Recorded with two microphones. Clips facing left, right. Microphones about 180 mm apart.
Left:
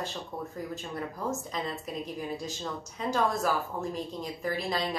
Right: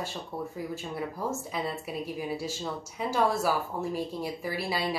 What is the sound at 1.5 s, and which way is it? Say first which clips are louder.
A woman's voice: right 2 dB; 10° right (ahead or behind).